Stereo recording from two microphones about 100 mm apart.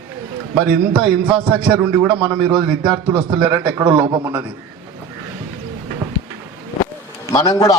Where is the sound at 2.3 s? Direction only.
5° right (ahead or behind).